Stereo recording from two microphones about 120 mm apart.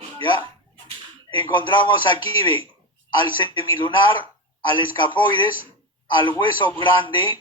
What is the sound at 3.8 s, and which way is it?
A man's voice, 40° left (ahead or behind).